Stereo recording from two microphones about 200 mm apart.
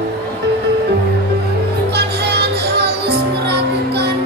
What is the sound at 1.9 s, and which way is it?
Music, 55° right (ahead or behind).